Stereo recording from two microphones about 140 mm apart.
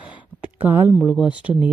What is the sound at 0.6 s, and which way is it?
Speech, 15° right (ahead or behind).